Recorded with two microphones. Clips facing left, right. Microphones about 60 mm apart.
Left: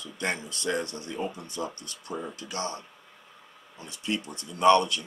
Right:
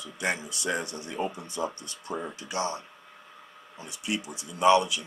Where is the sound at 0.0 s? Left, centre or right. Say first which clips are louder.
Right 1 dB; centre.